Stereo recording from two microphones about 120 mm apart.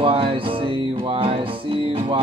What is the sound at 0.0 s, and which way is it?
Music, 50° right (ahead or behind).